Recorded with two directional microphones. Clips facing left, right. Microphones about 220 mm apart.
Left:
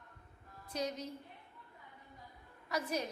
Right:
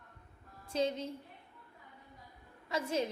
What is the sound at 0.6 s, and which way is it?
Speech, 25° right (ahead or behind).